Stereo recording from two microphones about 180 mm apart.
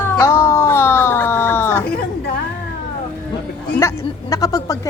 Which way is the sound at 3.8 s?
15° left (ahead or behind).